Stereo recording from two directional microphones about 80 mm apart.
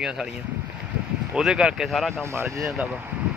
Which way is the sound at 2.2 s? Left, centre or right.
Right.